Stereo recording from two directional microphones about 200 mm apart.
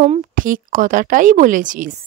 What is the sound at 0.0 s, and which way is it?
Speech, 35° right (ahead or behind).